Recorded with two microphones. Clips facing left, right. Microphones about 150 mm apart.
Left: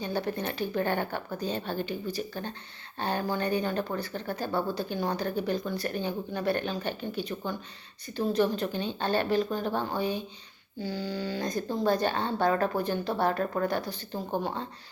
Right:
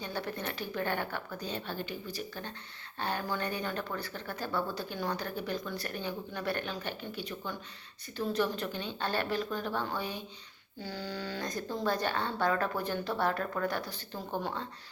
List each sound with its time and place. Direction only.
0.0 s speech: 25° left (ahead or behind)
10.8 s speech: 15° left (ahead or behind)